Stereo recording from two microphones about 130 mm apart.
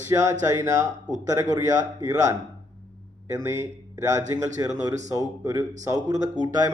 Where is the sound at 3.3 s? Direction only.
20° right (ahead or behind).